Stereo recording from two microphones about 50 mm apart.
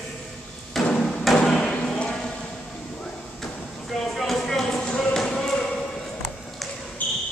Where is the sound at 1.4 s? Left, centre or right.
Left.